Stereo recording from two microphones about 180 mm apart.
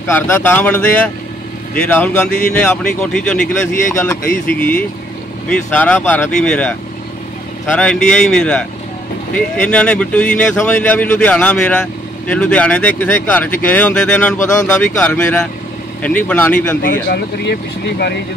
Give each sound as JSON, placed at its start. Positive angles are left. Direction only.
{"t": 0.1, "sound": "speech", "side_deg": 10}
{"t": 4.5, "sound": "speech", "side_deg": 10}
{"t": 7.7, "sound": "speech", "side_deg": 5}
{"t": 16.8, "sound": "speech", "side_deg": 65}